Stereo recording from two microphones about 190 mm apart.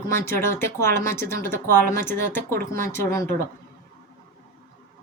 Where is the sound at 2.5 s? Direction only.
50° right (ahead or behind).